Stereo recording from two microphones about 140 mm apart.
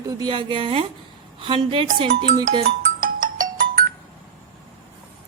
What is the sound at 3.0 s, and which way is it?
Ringtone, 80° right.